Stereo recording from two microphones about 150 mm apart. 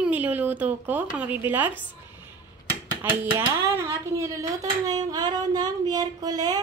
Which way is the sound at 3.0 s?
10° right (ahead or behind).